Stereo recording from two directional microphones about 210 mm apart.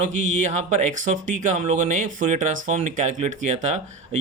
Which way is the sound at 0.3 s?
35° right (ahead or behind).